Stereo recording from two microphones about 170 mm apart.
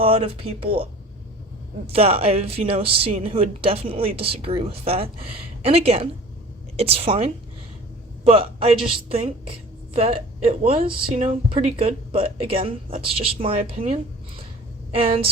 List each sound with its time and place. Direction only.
0.0 s a woman's voice: 35° right (ahead or behind)
1.9 s a woman's voice: 35° right (ahead or behind)
14.9 s a woman's voice: 35° right (ahead or behind)